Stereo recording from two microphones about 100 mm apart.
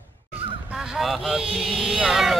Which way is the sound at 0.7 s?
5° right (ahead or behind).